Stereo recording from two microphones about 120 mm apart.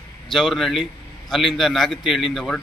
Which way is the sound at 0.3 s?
Centre (ahead or behind).